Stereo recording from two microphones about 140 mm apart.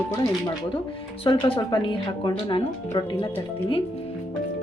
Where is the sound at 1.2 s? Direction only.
40° left (ahead or behind).